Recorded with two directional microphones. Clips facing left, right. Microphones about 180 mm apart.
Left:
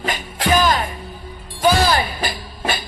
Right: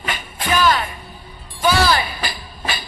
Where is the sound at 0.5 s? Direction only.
40° left (ahead or behind).